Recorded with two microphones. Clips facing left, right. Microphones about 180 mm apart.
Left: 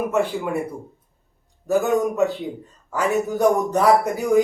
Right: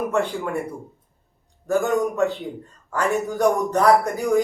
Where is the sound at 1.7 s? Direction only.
10° left (ahead or behind).